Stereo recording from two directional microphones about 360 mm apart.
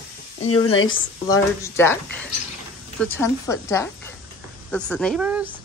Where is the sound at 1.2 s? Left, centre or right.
Centre.